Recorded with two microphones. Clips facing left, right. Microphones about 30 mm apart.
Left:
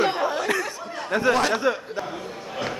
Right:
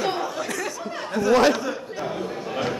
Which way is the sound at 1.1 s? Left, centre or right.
Left.